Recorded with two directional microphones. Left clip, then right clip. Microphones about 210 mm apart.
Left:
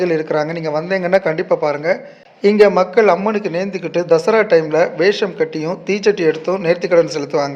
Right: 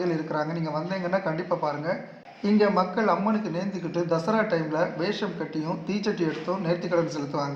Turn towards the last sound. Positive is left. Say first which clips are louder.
# left 12 dB
turn(degrees=40)  # may be behind; listen again after turning